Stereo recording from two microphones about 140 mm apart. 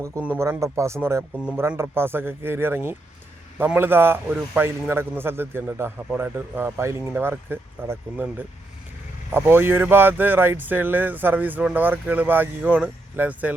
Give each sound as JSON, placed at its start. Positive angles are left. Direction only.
{"t": 0.0, "sound": "speech", "side_deg": -15}